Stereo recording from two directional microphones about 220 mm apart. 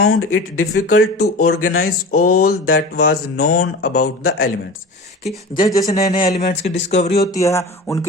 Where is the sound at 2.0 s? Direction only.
40° left (ahead or behind).